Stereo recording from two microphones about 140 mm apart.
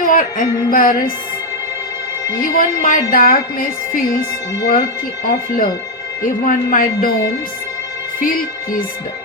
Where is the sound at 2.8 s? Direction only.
70° left (ahead or behind); by 4.2 s 90° left.